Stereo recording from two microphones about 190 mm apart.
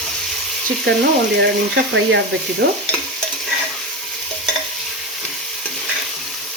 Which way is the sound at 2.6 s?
50° right (ahead or behind).